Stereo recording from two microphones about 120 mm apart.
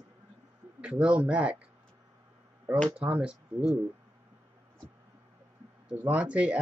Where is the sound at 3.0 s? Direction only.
10° right (ahead or behind).